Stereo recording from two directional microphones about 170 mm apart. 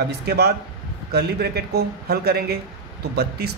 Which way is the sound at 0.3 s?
70° right (ahead or behind).